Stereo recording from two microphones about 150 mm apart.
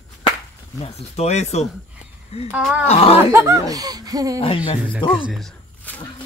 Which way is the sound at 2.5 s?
5° right (ahead or behind).